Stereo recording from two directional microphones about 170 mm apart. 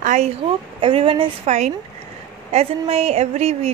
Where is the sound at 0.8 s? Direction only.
30° right (ahead or behind).